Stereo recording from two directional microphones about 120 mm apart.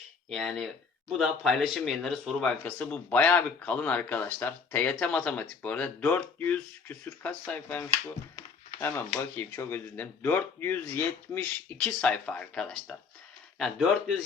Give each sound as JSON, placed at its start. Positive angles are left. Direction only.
{"t": 0.3, "sound": "speech", "side_deg": 0}
{"t": 11.8, "sound": "speech", "side_deg": 5}